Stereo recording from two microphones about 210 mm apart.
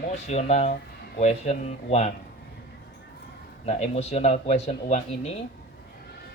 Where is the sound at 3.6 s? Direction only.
30° left (ahead or behind).